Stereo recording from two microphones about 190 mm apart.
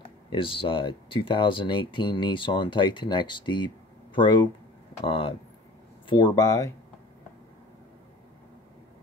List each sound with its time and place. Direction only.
0.3 s speech: 25° left (ahead or behind)